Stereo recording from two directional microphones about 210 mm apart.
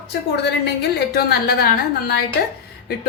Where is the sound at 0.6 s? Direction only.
50° left (ahead or behind).